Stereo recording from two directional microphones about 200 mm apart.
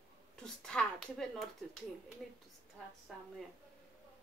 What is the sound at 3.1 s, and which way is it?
Speech, centre (ahead or behind).